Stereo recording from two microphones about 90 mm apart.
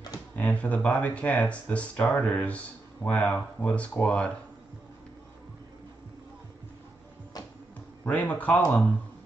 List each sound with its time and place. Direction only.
0.4 s speech: 15° left (ahead or behind)
8.0 s speech: 20° left (ahead or behind)